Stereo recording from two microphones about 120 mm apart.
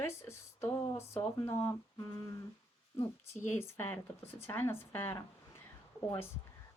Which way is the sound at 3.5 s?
20° left (ahead or behind).